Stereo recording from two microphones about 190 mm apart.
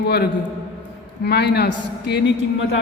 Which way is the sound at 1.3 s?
60° left (ahead or behind).